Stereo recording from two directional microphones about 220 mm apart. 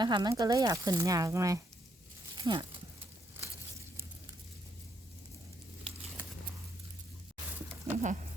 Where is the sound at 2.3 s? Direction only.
20° right (ahead or behind).